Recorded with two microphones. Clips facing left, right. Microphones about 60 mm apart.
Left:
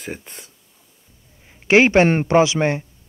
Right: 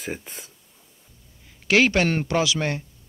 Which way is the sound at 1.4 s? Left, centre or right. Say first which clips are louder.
Left 5 dB; left.